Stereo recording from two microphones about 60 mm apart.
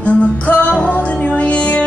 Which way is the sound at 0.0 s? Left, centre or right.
Left.